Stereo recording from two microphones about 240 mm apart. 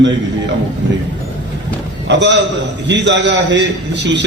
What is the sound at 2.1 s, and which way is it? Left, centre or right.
A man's voice, right.